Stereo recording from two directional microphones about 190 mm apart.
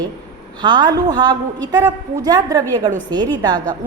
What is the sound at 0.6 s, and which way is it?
A woman's voice, 20° right (ahead or behind).